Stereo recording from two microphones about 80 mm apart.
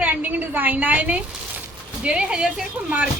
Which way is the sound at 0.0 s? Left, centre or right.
Right.